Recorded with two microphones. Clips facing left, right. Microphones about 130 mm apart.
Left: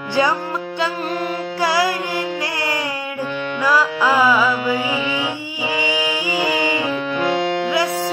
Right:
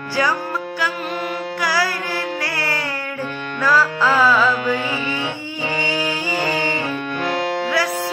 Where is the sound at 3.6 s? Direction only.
15° left (ahead or behind).